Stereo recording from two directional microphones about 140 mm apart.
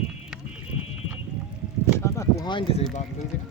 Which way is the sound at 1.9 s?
20° left (ahead or behind).